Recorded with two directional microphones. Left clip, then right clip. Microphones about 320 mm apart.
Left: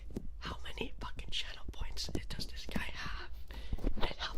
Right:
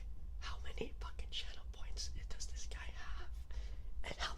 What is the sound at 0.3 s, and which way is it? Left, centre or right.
Whispering, centre.